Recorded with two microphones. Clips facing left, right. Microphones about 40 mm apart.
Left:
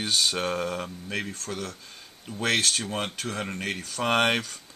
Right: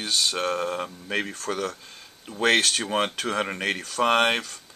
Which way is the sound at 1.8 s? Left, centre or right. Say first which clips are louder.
Even; centre.